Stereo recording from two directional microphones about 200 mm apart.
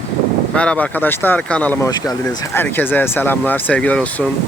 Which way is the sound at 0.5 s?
5° left (ahead or behind).